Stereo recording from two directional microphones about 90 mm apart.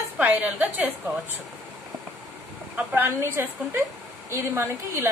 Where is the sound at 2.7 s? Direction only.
25° right (ahead or behind).